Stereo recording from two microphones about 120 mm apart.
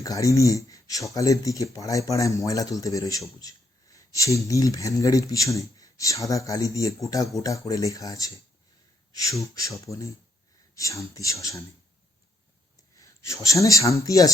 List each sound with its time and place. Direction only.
0.0 s speech: 30° left (ahead or behind)
9.4 s speech: 30° left (ahead or behind)
12.7 s speech: 25° left (ahead or behind)